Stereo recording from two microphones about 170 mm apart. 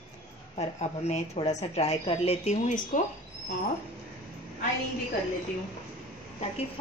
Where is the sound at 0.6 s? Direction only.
40° left (ahead or behind).